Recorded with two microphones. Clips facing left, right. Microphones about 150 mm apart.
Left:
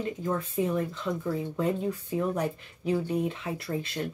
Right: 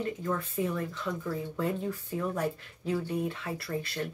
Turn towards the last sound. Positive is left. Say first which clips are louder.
# left 2 dB
turn(degrees=20)  # may be behind; listen again after turning